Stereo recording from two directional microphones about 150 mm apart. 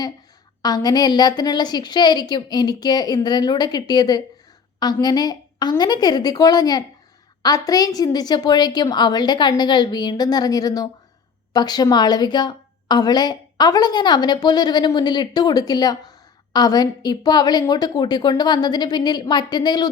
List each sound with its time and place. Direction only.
0.6 s a woman's voice: 25° left (ahead or behind)